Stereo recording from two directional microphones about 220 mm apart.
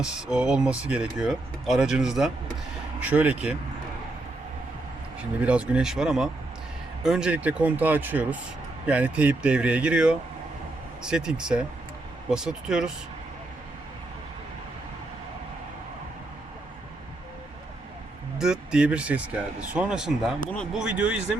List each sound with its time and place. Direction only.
0.0 s speech: 5° right (ahead or behind)
5.4 s speech: 5° right (ahead or behind)
18.3 s speech: 5° right (ahead or behind)